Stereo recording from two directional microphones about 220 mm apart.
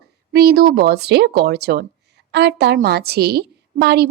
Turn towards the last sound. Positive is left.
turn(degrees=-50)  # may be behind; listen again after turning